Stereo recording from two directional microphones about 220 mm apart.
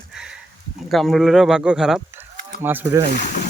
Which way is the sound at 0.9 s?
Centre (ahead or behind).